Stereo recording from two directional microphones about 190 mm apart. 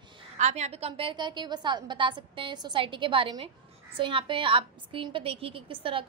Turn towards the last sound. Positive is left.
turn(degrees=-30)  # may be behind; listen again after turning